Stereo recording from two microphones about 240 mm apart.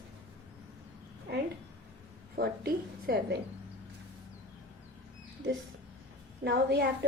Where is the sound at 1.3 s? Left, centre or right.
Right.